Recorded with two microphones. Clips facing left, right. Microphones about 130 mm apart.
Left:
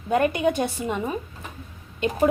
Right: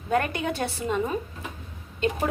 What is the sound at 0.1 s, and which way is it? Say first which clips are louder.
A woman's voice: left 5 dB; 20° left (ahead or behind).